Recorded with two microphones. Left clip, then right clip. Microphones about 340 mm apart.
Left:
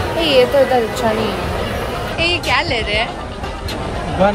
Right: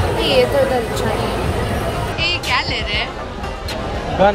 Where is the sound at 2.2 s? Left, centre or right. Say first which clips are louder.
Left 3 dB; centre.